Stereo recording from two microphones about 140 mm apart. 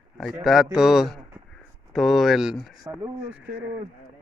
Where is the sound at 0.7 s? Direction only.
5° right (ahead or behind).